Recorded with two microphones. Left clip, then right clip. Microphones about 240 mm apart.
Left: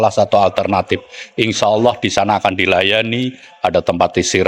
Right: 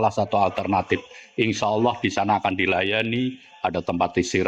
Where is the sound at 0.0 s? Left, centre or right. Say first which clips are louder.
Left 9 dB; left.